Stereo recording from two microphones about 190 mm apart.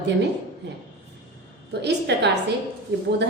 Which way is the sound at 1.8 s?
65° right (ahead or behind).